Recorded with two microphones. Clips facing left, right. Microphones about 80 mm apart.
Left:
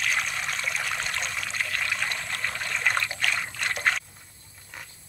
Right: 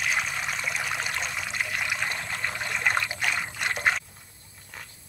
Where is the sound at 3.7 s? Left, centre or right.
Centre.